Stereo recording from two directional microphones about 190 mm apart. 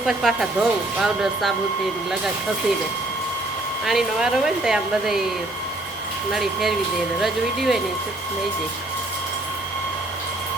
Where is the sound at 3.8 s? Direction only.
Centre (ahead or behind).